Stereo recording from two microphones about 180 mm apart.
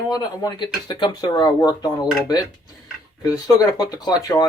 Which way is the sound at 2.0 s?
5° right (ahead or behind).